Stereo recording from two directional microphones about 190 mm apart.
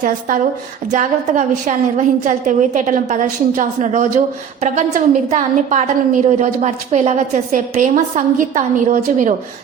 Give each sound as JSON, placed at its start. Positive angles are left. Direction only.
{"t": 0.9, "sound": "a woman's voice", "side_deg": -40}